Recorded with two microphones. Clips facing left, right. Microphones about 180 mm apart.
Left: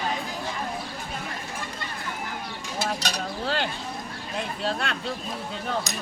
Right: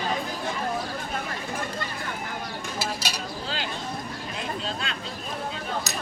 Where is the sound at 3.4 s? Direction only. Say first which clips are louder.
Left 5 dB; 55° left (ahead or behind).